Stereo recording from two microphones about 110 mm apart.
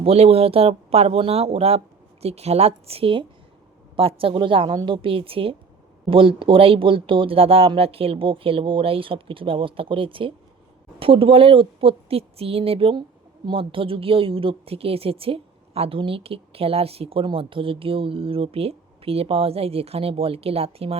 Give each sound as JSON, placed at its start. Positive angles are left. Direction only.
{"t": 0.0, "sound": "a woman's voice", "side_deg": -65}